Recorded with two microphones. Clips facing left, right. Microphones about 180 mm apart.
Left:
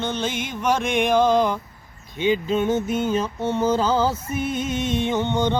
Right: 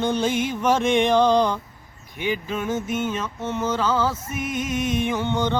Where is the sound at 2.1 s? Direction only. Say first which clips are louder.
Left 6 dB; 25° left (ahead or behind).